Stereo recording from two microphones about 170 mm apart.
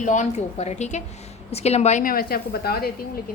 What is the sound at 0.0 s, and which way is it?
A woman's voice, 45° left (ahead or behind).